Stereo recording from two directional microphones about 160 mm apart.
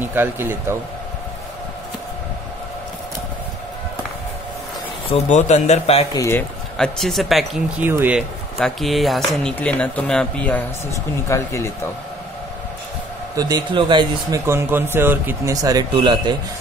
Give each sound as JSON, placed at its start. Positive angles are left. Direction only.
{"t": 0.0, "sound": "speech", "side_deg": -15}
{"t": 5.1, "sound": "speech", "side_deg": 45}
{"t": 6.1, "sound": "speech", "side_deg": 15}
{"t": 6.8, "sound": "speech", "side_deg": 0}
{"t": 7.8, "sound": "speech", "side_deg": -10}
{"t": 8.5, "sound": "speech", "side_deg": 0}
{"t": 13.4, "sound": "speech", "side_deg": -25}
{"t": 14.4, "sound": "speech", "side_deg": -15}